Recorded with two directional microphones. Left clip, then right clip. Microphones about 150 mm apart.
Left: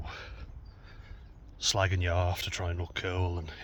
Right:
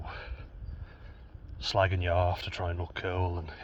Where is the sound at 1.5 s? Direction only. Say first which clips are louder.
Right 1 dB; 25° left (ahead or behind).